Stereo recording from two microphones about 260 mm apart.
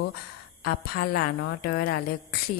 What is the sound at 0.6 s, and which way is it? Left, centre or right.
Mantra, left.